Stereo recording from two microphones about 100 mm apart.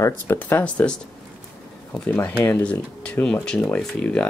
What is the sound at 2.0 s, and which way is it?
Speech, 15° left (ahead or behind).